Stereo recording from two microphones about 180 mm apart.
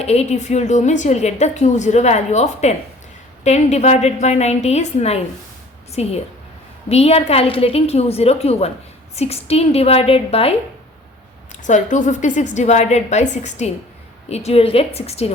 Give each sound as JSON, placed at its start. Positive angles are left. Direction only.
{"t": 0.0, "sound": "a woman's voice", "side_deg": 35}
{"t": 11.6, "sound": "a woman's voice", "side_deg": 45}